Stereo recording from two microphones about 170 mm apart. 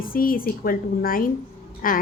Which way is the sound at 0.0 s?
55° left (ahead or behind).